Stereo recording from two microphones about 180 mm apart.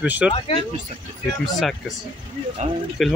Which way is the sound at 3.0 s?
Centre (ahead or behind).